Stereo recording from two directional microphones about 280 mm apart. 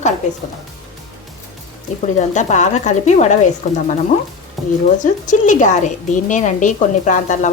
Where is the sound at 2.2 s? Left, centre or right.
Left.